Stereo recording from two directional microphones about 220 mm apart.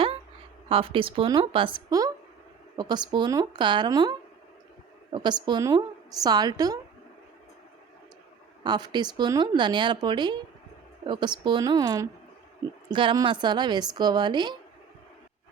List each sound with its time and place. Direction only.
0.7 s a woman's voice: 25° right (ahead or behind)
8.6 s a woman's voice: 20° right (ahead or behind)